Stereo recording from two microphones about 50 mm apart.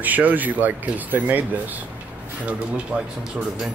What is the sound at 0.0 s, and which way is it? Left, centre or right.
Speech, right.